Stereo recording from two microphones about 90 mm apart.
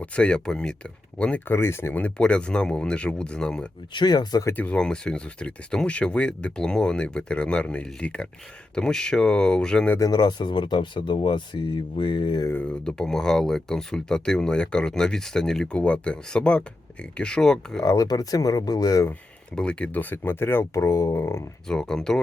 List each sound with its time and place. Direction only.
0.0 s speech: 10° left (ahead or behind)
1.5 s speech: 25° left (ahead or behind)
2.0 s speech: 15° left (ahead or behind)
3.9 s speech: 55° left (ahead or behind)
4.5 s speech: 15° left (ahead or behind)
10.0 s speech: 50° left (ahead or behind)
12.6 s speech: 10° left (ahead or behind)
17.8 s speech: 40° left (ahead or behind)
19.5 s speech: 10° left (ahead or behind); by 21.4 s 30° left (ahead or behind)
21.7 s speech: 5° left (ahead or behind)